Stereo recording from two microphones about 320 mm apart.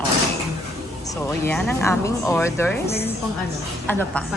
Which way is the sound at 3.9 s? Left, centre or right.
Centre.